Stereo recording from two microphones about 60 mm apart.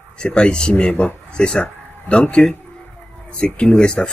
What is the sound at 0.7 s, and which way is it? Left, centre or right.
Speech, left.